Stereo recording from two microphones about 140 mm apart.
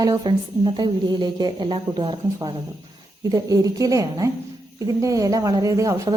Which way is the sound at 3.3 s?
25° right (ahead or behind).